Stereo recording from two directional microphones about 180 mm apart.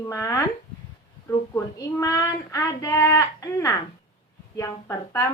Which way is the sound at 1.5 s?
15° left (ahead or behind).